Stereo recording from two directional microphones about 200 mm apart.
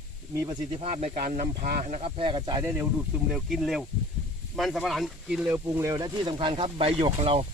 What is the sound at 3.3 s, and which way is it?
Speech, centre (ahead or behind).